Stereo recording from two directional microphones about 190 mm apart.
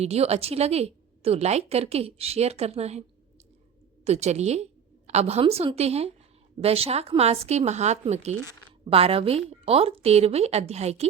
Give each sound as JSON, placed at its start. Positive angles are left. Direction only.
{"t": 0.0, "sound": "a woman's voice", "side_deg": -35}
{"t": 4.0, "sound": "a woman's voice", "side_deg": -35}